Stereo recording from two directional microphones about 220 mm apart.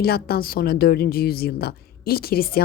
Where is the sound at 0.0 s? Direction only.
45° left (ahead or behind).